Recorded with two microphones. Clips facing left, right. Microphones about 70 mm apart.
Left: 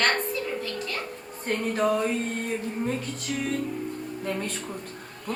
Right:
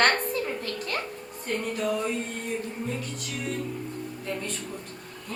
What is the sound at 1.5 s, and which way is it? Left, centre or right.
Speech, left.